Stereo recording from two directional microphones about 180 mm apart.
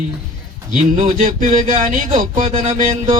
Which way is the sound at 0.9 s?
40° right (ahead or behind).